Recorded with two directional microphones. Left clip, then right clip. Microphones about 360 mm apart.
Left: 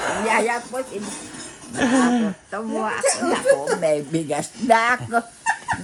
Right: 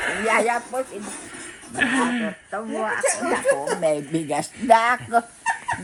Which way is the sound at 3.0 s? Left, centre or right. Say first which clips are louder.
Left 4 dB; centre.